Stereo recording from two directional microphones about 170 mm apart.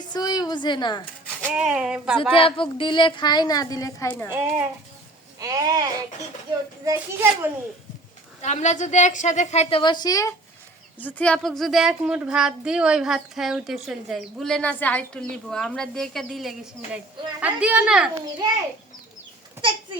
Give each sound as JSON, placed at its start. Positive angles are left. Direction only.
{"t": 0.0, "sound": "a woman's voice", "side_deg": 25}
{"t": 1.5, "sound": "speech", "side_deg": -5}
{"t": 2.3, "sound": "a woman's voice", "side_deg": 30}
{"t": 4.3, "sound": "a woman's voice", "side_deg": -15}
{"t": 8.4, "sound": "a woman's voice", "side_deg": 45}
{"t": 10.9, "sound": "a woman's voice", "side_deg": 10}